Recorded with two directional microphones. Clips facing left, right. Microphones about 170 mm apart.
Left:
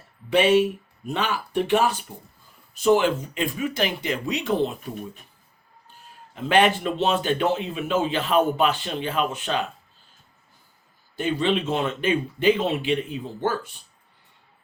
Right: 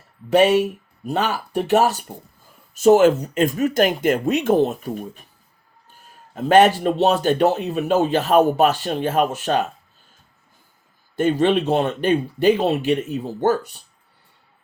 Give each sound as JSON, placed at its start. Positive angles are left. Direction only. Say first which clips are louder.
{"t": 0.3, "sound": "speech", "louder": "right 3 dB", "side_deg": -45}
{"t": 6.3, "sound": "speech", "louder": "right 6 dB", "side_deg": -45}
{"t": 11.2, "sound": "speech", "louder": "right 6 dB", "side_deg": -50}